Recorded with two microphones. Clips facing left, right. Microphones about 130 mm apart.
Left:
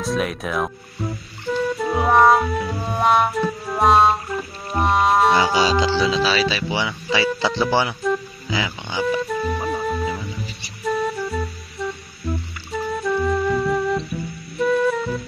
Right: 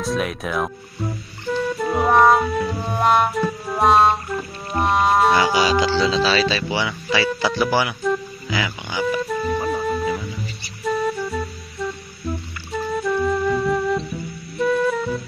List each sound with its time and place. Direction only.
0.0 s music: centre (ahead or behind)
5.9 s speech: 10° left (ahead or behind)
6.7 s speech: 20° left (ahead or behind)
8.0 s speech: centre (ahead or behind)
8.5 s speech: 20° left (ahead or behind)
9.0 s music: centre (ahead or behind)